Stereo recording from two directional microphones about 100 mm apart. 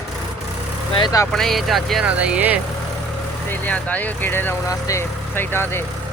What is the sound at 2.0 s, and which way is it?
Speech, 15° right (ahead or behind).